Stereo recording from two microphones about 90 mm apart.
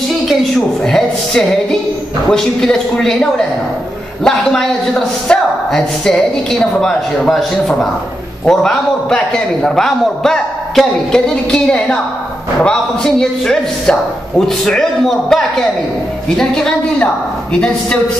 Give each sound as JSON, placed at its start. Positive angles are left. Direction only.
{"t": 0.8, "sound": "a man's voice", "side_deg": 5}